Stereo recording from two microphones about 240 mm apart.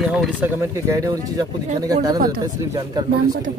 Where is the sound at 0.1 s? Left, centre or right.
Centre.